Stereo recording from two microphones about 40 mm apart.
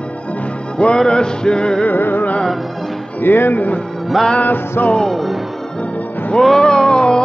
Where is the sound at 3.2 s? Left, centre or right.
Left.